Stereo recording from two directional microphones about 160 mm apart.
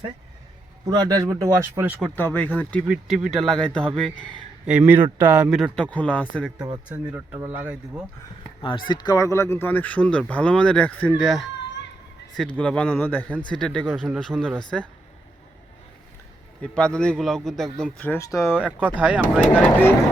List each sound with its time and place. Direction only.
0.9 s speech: 25° right (ahead or behind)
2.1 s speech: 10° left (ahead or behind)
2.8 s a man's voice: 5° right (ahead or behind)
4.6 s a man's voice: 10° right (ahead or behind); by 6.5 s 5° left (ahead or behind)
7.1 s speech: 10° right (ahead or behind)
8.9 s speech: 25° left (ahead or behind); by 11.3 s 10° left (ahead or behind)
12.4 s a man's voice: 5° left (ahead or behind)
16.6 s a man's voice: 5° left (ahead or behind)
18.5 s speech: 10° right (ahead or behind)